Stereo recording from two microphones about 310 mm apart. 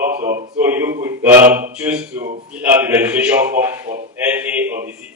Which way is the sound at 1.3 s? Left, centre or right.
Right.